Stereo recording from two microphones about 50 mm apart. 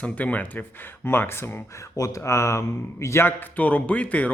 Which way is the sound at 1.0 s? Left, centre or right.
Left.